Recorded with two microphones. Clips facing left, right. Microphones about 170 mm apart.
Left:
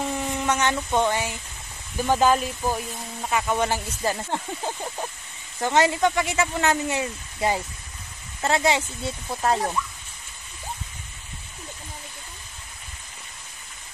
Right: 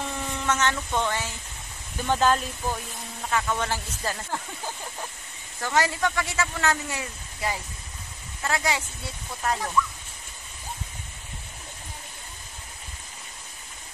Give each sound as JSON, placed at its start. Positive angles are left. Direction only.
{"t": 0.1, "sound": "speech", "side_deg": 15}